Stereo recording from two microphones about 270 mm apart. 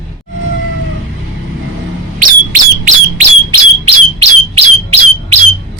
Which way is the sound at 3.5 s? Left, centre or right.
Right.